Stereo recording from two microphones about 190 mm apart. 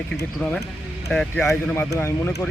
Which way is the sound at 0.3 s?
Centre (ahead or behind).